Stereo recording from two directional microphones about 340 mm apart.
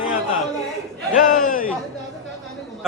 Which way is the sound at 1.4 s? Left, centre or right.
Left.